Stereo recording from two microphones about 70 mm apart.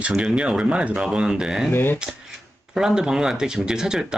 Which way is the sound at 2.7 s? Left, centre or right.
Centre.